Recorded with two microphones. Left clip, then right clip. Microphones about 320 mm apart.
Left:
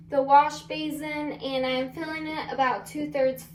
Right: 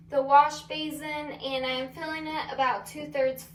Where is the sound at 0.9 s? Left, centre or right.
Centre.